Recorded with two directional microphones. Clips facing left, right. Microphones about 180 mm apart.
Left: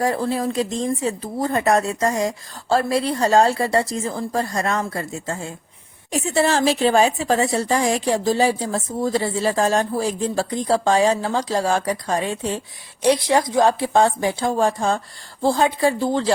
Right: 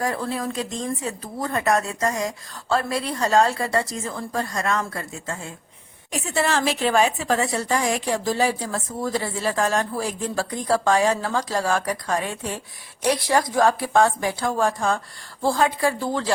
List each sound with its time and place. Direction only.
0.0 s a woman's voice: 30° left (ahead or behind)